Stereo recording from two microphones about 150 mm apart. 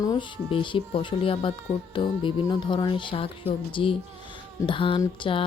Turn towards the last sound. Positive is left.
turn(degrees=35)  # may be behind; listen again after turning